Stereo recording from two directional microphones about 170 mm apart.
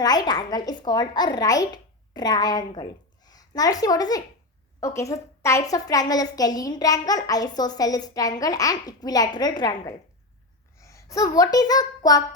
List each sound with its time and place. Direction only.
0.0 s a woman's voice: 25° left (ahead or behind)